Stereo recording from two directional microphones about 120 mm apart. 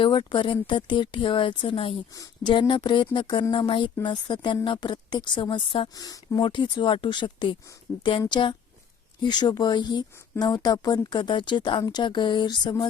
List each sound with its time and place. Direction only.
0.0 s speech: 40° left (ahead or behind)
6.0 s speech: 30° left (ahead or behind)